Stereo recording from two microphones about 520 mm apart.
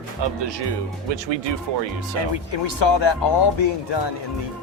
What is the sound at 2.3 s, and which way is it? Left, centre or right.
Speech, left.